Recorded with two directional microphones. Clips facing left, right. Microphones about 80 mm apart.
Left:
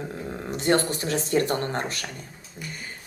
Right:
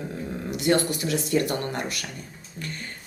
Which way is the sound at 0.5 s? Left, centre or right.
Left.